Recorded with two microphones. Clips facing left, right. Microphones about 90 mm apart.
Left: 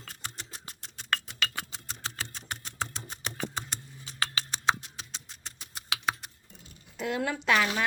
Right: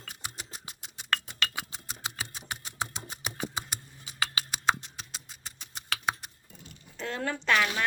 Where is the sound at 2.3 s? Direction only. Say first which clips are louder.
Even; 10° right (ahead or behind).